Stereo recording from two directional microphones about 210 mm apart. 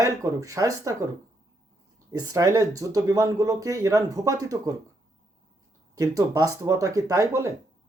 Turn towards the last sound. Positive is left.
turn(degrees=-15)  # may be behind; listen again after turning